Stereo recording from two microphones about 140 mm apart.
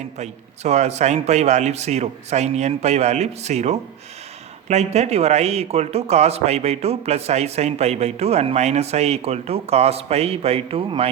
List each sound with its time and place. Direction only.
0.2 s a man's voice: 55° right (ahead or behind)